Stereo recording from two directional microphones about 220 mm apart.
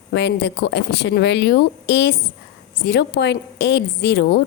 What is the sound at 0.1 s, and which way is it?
Speech, 50° left (ahead or behind).